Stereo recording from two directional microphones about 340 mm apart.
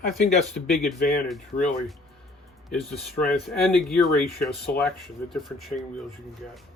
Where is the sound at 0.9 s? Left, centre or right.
Left.